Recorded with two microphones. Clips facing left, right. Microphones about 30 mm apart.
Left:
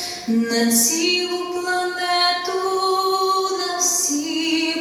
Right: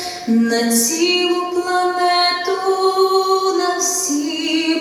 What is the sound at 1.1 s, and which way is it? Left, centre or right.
Music, centre.